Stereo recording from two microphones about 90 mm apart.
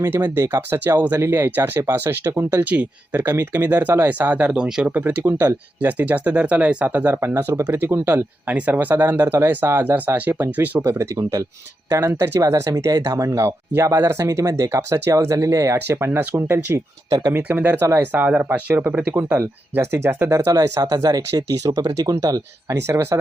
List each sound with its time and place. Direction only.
0.0 s speech: 25° right (ahead or behind)
8.4 s speech: 15° right (ahead or behind)
10.8 s speech: 35° right (ahead or behind)
17.1 s speech: 45° right (ahead or behind)
17.3 s speech: 20° right (ahead or behind)
19.4 s speech: 30° right (ahead or behind)
20.3 s speech: 40° right (ahead or behind)